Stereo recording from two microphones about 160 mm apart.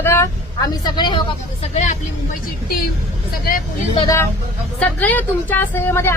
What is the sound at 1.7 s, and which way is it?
Speech, 50° left (ahead or behind).